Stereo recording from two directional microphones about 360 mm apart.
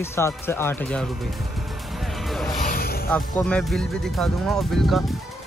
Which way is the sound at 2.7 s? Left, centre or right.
Left.